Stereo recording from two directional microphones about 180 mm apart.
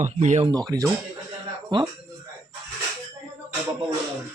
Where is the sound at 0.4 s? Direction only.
20° right (ahead or behind).